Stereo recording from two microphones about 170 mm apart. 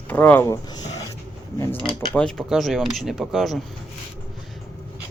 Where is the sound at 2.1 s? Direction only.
5° left (ahead or behind).